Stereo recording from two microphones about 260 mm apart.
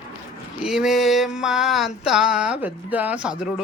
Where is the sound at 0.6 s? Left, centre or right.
Centre.